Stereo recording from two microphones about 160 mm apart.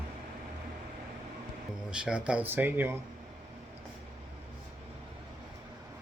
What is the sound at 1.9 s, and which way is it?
Speech, 5° right (ahead or behind).